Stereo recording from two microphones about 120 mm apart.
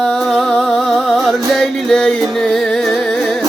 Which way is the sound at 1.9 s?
5° left (ahead or behind).